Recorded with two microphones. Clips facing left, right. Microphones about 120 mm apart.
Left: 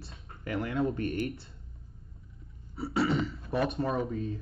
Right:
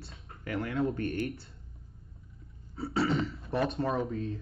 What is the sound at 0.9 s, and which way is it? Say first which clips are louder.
Speech: left 1 dB; 20° left (ahead or behind).